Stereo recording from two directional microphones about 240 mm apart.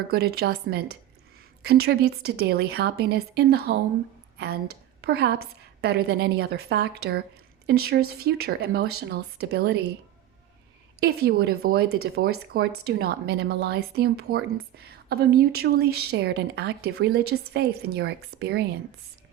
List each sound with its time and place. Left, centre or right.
0.1 s speech: right
11.0 s speech: right